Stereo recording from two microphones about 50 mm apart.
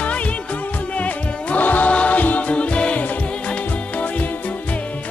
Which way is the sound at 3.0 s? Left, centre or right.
Left.